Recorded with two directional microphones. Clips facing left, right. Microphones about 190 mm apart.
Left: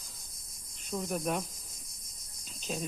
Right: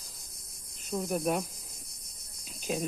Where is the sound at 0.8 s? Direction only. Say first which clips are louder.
Right 3 dB; 5° right (ahead or behind).